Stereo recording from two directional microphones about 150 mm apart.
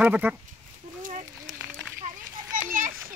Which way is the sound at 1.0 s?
65° right (ahead or behind).